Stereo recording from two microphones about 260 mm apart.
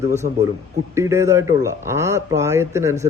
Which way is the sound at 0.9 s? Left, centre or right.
Centre.